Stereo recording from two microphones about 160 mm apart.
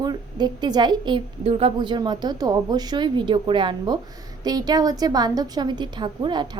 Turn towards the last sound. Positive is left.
turn(degrees=-30)  # may be behind; listen again after turning